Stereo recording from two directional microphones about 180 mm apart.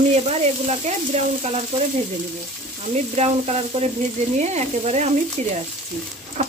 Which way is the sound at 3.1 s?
35° right (ahead or behind).